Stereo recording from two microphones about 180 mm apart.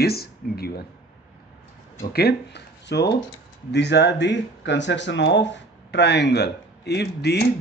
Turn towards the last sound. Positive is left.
turn(degrees=65)  # may be behind; listen again after turning